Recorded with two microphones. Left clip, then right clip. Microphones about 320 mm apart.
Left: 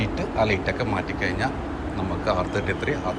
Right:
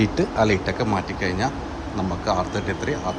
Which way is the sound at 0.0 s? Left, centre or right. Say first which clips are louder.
Right 3 dB; centre.